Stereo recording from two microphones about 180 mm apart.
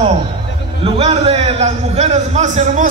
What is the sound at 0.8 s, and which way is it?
A man's voice, 35° right (ahead or behind).